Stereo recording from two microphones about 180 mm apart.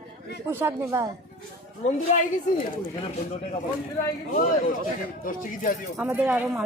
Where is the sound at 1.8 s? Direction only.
45° left (ahead or behind).